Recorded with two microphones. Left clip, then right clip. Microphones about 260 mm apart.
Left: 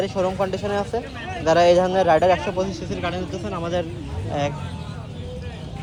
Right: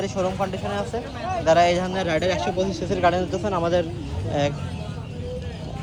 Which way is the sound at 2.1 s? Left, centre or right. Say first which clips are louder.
Left 6 dB; centre.